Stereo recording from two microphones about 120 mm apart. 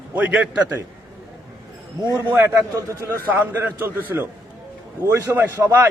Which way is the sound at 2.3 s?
20° right (ahead or behind).